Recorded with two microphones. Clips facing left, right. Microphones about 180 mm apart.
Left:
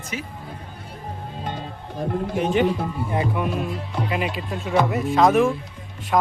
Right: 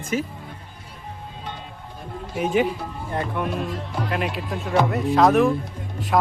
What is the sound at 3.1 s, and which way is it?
Speech, 5° left (ahead or behind).